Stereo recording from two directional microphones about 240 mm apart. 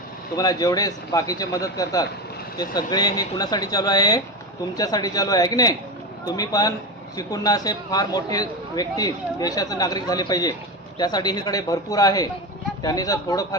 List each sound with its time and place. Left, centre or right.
0.3 s a man's voice: centre